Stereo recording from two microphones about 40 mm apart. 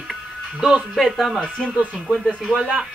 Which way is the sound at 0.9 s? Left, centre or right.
Centre.